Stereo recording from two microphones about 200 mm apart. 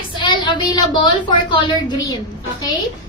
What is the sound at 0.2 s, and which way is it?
A woman's voice, 25° left (ahead or behind).